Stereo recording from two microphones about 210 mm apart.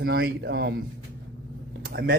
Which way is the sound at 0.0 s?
50° right (ahead or behind).